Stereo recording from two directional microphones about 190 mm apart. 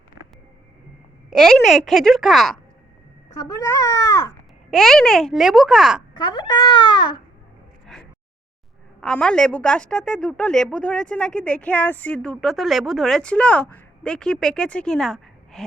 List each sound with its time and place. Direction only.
1.3 s a woman's voice: centre (ahead or behind)
3.3 s a child's voice: 20° left (ahead or behind)
4.7 s a woman's voice: centre (ahead or behind)
6.1 s a child's voice: 25° left (ahead or behind)
9.0 s a woman's voice: 5° left (ahead or behind)